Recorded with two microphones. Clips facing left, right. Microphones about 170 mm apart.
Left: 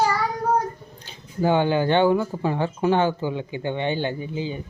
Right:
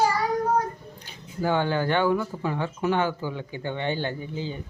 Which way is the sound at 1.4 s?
20° left (ahead or behind).